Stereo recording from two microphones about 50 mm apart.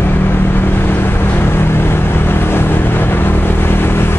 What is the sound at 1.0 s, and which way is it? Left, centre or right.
Vehicle, left.